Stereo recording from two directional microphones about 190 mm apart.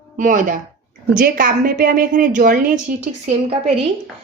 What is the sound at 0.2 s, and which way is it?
A woman's voice, 45° right (ahead or behind).